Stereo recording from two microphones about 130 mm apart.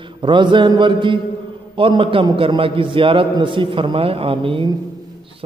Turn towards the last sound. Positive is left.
turn(degrees=-45)  # may be behind; listen again after turning